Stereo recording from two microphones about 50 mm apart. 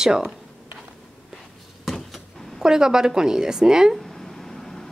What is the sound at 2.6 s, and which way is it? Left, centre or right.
A woman's voice, centre.